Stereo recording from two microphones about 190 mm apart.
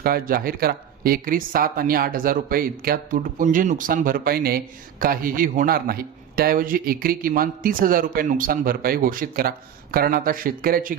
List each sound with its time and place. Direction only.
0.0 s speech: 50° right (ahead or behind)